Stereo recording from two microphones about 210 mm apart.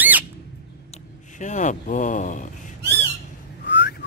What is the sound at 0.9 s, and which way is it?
Speech, 35° left (ahead or behind).